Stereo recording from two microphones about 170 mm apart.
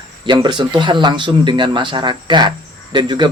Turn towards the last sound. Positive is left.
turn(degrees=-25)  # may be behind; listen again after turning